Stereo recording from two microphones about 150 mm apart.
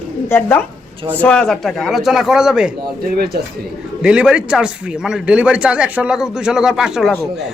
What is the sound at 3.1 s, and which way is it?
Speech, 90° right.